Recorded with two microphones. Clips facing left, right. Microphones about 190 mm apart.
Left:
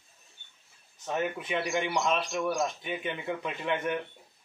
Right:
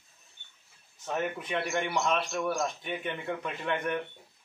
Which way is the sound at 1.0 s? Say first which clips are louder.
Left 1 dB; centre (ahead or behind).